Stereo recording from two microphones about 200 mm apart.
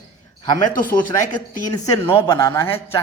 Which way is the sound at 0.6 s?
45° left (ahead or behind).